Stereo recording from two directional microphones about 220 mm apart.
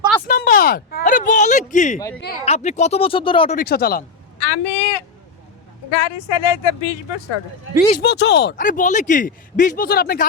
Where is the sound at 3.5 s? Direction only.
45° left (ahead or behind).